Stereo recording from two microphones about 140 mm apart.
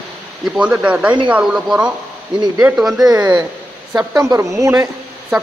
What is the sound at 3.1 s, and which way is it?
A woman's voice, 25° right (ahead or behind).